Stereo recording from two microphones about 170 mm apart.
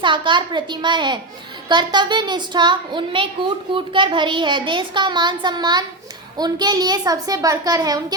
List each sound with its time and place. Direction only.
0.0 s a child's voice: 30° right (ahead or behind)